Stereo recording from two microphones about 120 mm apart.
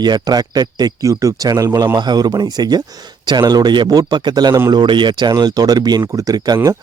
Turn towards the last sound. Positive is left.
turn(degrees=-30)  # may be behind; listen again after turning